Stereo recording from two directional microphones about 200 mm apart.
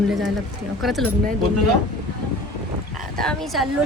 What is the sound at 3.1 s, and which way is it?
Speech, centre (ahead or behind).